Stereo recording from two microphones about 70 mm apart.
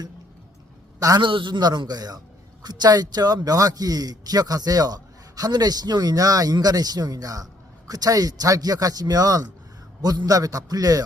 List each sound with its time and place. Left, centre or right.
0.9 s a man's voice: right